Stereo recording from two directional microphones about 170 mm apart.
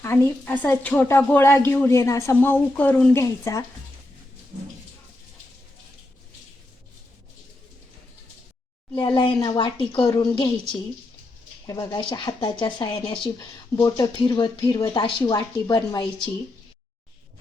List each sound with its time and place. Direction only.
0.0 s a woman's voice: 10° left (ahead or behind)
9.0 s speech: 30° left (ahead or behind)